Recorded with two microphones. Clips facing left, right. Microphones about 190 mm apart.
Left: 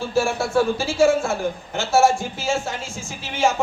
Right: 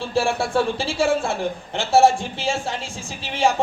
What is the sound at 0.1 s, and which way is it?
A woman's voice, 30° right (ahead or behind).